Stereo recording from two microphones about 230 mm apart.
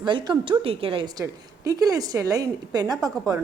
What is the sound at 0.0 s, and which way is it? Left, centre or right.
A woman's voice, right.